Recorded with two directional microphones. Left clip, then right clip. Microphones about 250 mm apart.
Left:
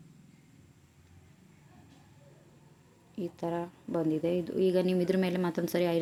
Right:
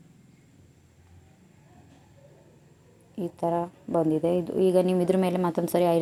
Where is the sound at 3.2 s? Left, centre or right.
Centre.